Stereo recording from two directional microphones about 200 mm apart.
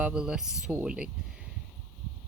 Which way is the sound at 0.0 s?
5° right (ahead or behind).